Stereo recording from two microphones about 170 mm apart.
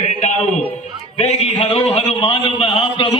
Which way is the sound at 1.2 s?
35° left (ahead or behind).